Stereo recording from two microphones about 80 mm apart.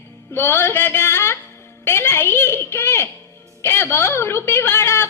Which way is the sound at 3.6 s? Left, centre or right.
Left.